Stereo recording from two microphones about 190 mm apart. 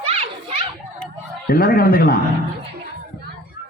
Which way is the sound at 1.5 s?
50° left (ahead or behind).